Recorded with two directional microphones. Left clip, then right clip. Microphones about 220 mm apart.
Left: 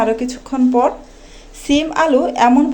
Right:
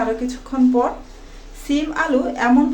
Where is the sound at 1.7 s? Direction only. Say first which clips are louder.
Left 5 dB; 30° left (ahead or behind).